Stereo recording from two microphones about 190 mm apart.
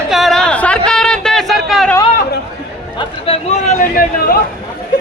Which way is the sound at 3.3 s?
40° left (ahead or behind).